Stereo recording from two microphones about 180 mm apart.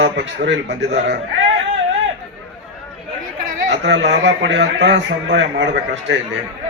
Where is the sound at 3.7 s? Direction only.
80° right.